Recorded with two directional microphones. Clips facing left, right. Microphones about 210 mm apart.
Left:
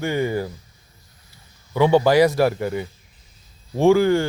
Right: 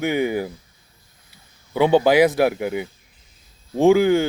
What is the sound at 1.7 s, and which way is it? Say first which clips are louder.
Speech: even; 20° right (ahead or behind).